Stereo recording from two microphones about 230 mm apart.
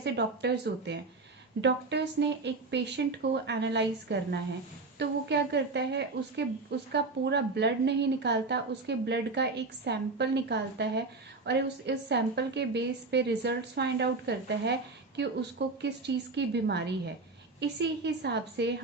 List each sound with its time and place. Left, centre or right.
0.0 s a woman's voice: right